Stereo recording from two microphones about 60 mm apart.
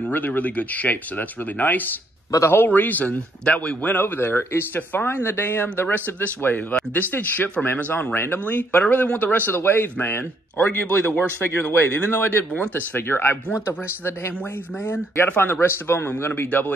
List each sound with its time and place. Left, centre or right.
0.1 s speech: left
4.0 s speech: left
14.8 s speech: left